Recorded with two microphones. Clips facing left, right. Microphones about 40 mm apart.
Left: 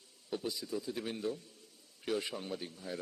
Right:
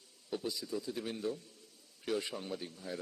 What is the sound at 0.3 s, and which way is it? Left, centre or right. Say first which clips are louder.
A man's voice: even; centre.